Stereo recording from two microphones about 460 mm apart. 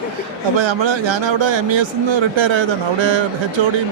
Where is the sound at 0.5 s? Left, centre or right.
Right.